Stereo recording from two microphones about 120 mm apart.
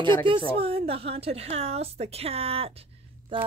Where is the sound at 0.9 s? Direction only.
55° right (ahead or behind).